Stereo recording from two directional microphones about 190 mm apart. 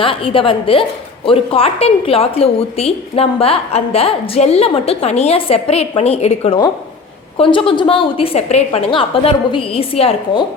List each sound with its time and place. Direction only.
0.0 s a woman's voice: 30° left (ahead or behind)